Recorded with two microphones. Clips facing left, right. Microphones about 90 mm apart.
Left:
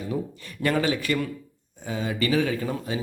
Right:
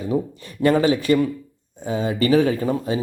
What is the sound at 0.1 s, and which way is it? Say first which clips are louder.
A man's voice: right 9 dB; 25° right (ahead or behind).